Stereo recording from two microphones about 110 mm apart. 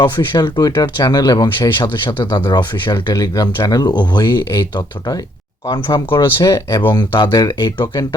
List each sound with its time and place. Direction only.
0.0 s speech: 40° left (ahead or behind)